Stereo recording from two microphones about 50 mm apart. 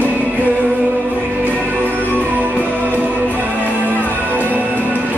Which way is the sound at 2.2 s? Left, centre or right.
Right.